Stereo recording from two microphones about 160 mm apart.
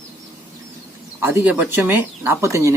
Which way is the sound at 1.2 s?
15° right (ahead or behind).